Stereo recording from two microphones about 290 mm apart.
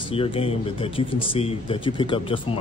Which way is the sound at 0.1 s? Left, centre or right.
Centre.